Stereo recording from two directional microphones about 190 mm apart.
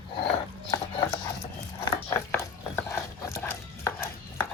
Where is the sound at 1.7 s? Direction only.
15° left (ahead or behind).